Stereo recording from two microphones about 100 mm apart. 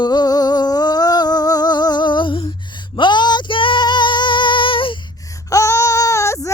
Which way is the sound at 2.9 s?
50° left (ahead or behind).